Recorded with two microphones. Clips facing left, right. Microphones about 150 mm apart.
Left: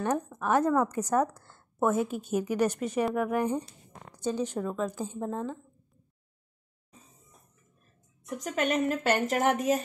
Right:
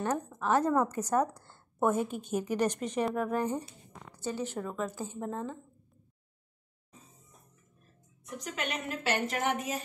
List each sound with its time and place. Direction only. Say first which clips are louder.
0.4 s speech: left 1 dB; 15° left (ahead or behind)
0.7 s a woman's voice: left 2 dB; 10° right (ahead or behind)
1.8 s a woman's voice: left 2 dB; 5° left (ahead or behind)
5.2 s a woman's voice: left 3 dB; centre (ahead or behind)
8.5 s a woman's voice: left 9 dB; 45° left (ahead or behind)